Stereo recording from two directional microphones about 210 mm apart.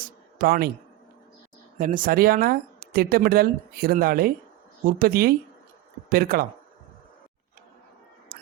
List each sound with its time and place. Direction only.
0.3 s a man's voice: 45° right (ahead or behind)
1.8 s speech: 40° right (ahead or behind)